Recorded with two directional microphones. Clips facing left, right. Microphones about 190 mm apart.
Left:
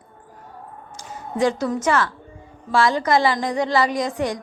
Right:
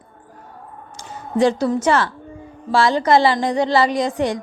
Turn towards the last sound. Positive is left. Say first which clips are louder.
# right 3 dB
turn(degrees=-30)  # may be behind; listen again after turning